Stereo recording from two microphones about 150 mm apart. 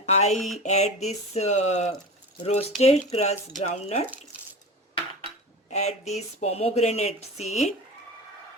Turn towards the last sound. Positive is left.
turn(degrees=50)  # may be behind; listen again after turning